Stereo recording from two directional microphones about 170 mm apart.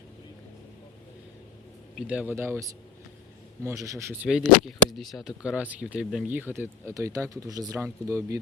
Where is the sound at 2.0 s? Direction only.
10° right (ahead or behind).